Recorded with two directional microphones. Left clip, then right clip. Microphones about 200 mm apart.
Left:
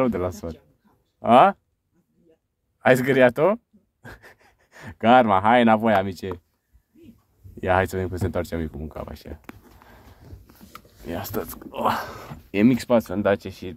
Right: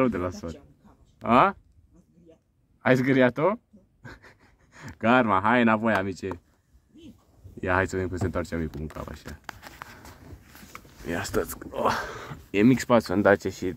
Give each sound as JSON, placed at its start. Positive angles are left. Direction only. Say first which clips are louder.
{"t": 0.0, "sound": "speech", "louder": "left 2 dB", "side_deg": 15}
{"t": 2.8, "sound": "speech", "louder": "left 5 dB", "side_deg": 15}
{"t": 7.6, "sound": "speech", "louder": "left 4 dB", "side_deg": 10}
{"t": 11.1, "sound": "speech", "louder": "right 2 dB", "side_deg": 0}
{"t": 13.1, "sound": "speech", "louder": "right 2 dB", "side_deg": -10}